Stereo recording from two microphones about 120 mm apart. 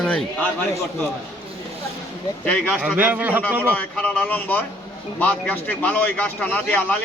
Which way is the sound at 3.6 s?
15° left (ahead or behind).